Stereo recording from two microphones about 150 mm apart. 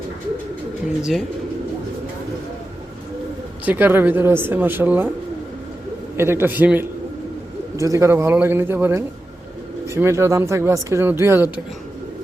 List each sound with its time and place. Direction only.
3.7 s speech: 10° right (ahead or behind)
6.1 s speech: 15° right (ahead or behind)